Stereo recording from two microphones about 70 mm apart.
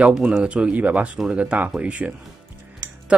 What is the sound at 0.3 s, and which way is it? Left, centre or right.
Speech, centre.